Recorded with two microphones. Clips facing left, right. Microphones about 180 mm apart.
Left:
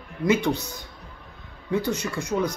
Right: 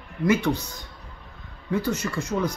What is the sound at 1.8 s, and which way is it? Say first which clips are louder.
Speech: even; 15° left (ahead or behind).